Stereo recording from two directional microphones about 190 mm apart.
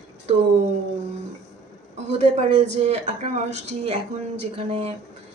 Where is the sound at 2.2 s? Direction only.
40° right (ahead or behind).